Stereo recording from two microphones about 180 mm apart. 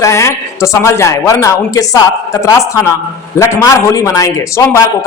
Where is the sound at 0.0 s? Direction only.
15° left (ahead or behind).